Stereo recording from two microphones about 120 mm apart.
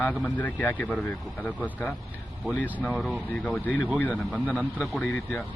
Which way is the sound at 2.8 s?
Centre (ahead or behind).